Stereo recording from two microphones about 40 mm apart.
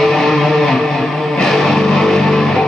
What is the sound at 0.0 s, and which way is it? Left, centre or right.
Music, centre.